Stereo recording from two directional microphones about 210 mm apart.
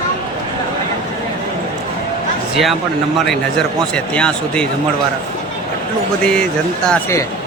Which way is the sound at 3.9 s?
5° left (ahead or behind).